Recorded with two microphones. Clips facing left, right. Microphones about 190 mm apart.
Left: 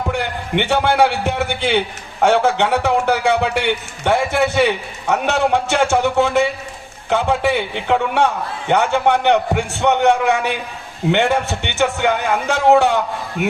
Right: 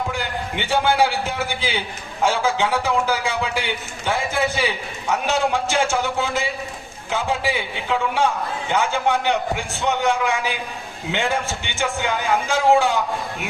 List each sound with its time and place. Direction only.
0.1 s a man's voice: 65° left (ahead or behind)